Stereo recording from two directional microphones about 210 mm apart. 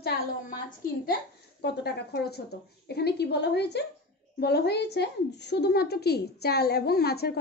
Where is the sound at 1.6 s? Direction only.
50° left (ahead or behind).